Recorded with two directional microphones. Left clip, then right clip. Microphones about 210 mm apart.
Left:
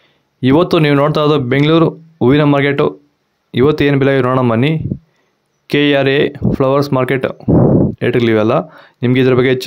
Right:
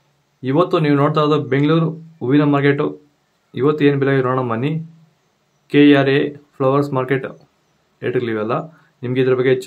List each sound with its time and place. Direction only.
0.4 s speech: 45° left (ahead or behind)